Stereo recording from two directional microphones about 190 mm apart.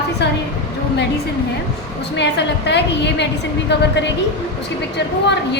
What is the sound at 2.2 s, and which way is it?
A woman's voice, 65° left (ahead or behind).